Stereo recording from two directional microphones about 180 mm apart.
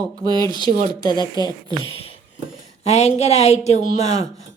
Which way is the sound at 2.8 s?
35° left (ahead or behind).